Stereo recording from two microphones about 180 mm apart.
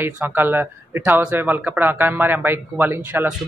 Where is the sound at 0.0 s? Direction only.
10° right (ahead or behind).